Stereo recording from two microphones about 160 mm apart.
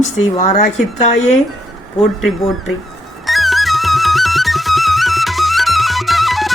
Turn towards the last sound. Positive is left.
turn(degrees=0)  # may be behind; listen again after turning